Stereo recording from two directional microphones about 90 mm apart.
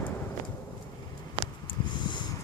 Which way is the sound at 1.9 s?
60° left (ahead or behind).